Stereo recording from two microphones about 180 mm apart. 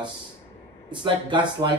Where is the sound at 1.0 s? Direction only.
25° right (ahead or behind).